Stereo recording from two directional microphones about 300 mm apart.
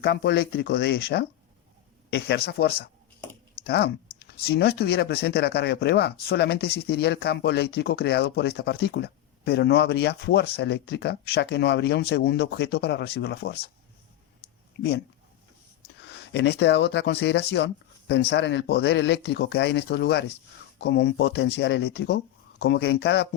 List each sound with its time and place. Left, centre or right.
0.0 s speech: left
14.8 s speech: left
16.3 s speech: left